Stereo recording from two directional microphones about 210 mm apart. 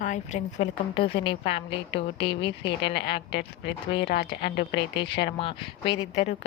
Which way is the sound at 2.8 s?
55° left (ahead or behind).